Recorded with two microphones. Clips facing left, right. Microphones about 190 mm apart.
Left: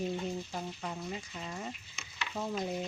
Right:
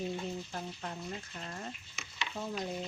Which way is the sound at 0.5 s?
5° left (ahead or behind).